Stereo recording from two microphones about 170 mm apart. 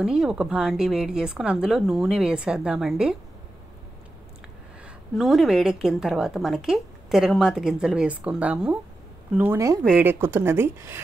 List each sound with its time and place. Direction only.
0.0 s a woman's voice: 5° right (ahead or behind)
5.1 s a woman's voice: centre (ahead or behind)